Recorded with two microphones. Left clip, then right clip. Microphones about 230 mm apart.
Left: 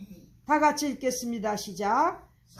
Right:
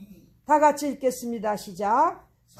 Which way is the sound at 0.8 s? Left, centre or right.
Right.